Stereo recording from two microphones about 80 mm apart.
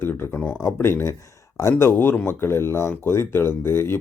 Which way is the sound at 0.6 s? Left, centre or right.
Left.